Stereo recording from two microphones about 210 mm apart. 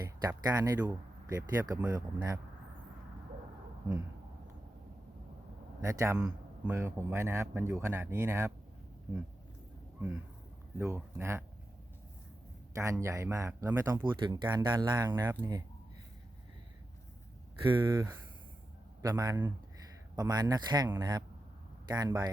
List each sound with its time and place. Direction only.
0.0 s speech: 15° right (ahead or behind)
5.8 s speech: 15° right (ahead or behind)
10.8 s speech: 10° right (ahead or behind)
12.7 s speech: 15° right (ahead or behind)
17.7 s a man's voice: 20° right (ahead or behind)